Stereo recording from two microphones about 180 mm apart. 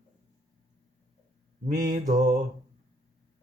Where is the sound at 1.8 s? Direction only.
45° right (ahead or behind).